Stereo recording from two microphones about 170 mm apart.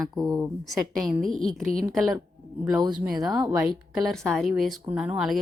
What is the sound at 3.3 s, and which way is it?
Speech, 20° right (ahead or behind).